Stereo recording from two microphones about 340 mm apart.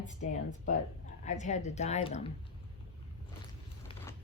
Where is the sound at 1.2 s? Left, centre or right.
Left.